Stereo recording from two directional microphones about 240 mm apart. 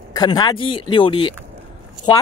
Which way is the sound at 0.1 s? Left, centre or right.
Centre.